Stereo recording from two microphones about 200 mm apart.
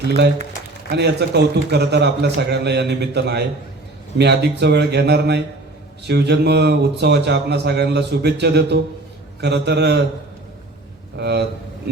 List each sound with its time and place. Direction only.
0.0 s a man's voice: 55° right (ahead or behind)
11.2 s speech: 55° right (ahead or behind)